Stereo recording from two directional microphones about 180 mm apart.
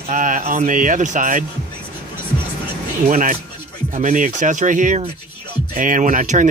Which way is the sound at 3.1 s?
50° right (ahead or behind).